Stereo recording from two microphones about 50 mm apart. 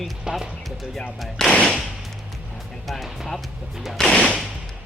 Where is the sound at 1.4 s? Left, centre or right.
Centre.